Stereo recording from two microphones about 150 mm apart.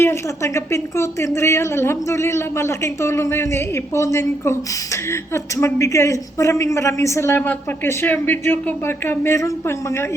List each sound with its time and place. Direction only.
0.0 s speech: 20° left (ahead or behind)